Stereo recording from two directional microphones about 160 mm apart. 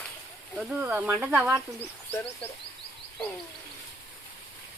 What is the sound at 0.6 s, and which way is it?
Speech, 5° right (ahead or behind).